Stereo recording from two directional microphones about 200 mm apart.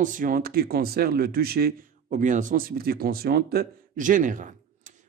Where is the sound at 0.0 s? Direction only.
40° right (ahead or behind).